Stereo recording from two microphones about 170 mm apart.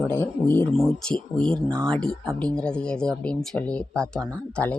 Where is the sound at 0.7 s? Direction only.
Centre (ahead or behind).